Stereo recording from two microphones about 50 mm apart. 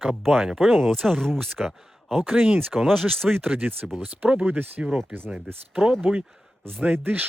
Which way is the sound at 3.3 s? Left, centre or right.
Right.